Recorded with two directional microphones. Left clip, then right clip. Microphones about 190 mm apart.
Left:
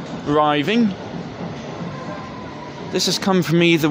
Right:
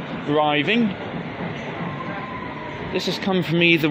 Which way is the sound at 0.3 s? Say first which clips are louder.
Left 2 dB; 30° left (ahead or behind).